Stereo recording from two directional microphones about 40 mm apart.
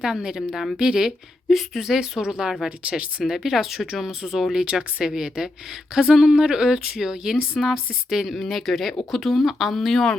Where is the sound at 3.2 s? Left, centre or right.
Centre.